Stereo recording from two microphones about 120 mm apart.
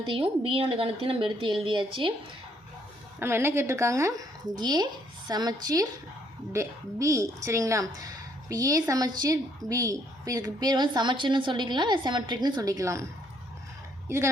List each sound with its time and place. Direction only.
0.1 s a woman's voice: 50° right (ahead or behind)
3.2 s a woman's voice: 20° right (ahead or behind)